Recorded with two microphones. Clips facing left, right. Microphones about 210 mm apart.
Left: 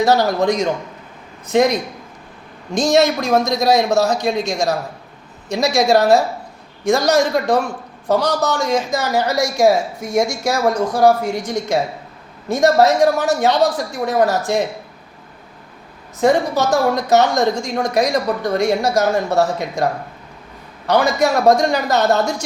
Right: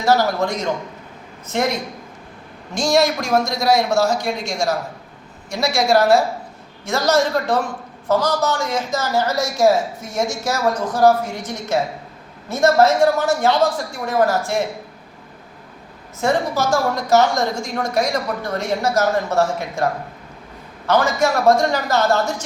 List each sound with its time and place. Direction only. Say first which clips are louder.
0.0 s speech: left 3 dB; 20° left (ahead or behind)
16.2 s speech: left 4 dB; 20° left (ahead or behind)